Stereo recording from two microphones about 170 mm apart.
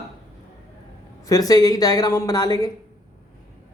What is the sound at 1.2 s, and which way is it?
A woman's voice, 20° left (ahead or behind).